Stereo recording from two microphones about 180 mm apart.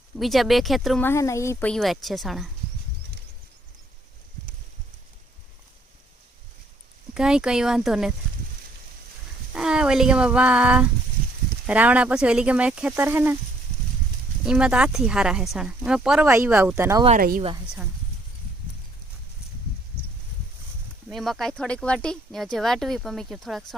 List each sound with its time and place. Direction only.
0.2 s speech: centre (ahead or behind)
1.0 s speech: 15° left (ahead or behind); by 2.5 s centre (ahead or behind)
7.1 s speech: 5° right (ahead or behind)
9.6 s speech: 5° right (ahead or behind)
14.4 s speech: 5° right (ahead or behind)
17.2 s a woman's voice: 50° right (ahead or behind)
21.1 s speech: centre (ahead or behind)